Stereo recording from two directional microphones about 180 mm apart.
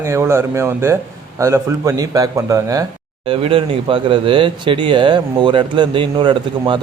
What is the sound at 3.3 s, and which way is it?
Speech, 30° right (ahead or behind).